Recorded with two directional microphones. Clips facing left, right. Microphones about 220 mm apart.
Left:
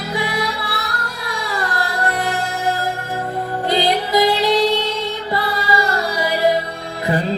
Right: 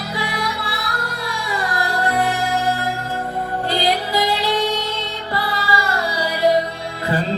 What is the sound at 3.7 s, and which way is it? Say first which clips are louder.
Music: left 4 dB; 20° left (ahead or behind).